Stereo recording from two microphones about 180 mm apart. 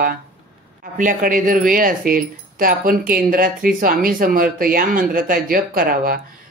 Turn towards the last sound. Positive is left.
turn(degrees=-55)  # may be behind; listen again after turning